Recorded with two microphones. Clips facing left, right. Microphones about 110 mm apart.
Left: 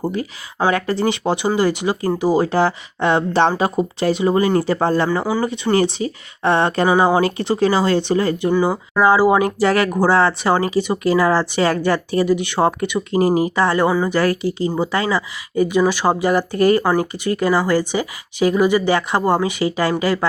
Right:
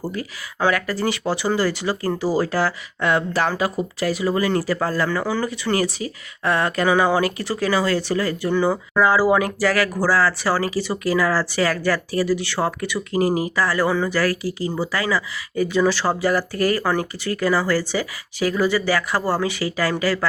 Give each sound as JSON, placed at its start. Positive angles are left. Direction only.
{"t": 0.0, "sound": "speech", "side_deg": 25}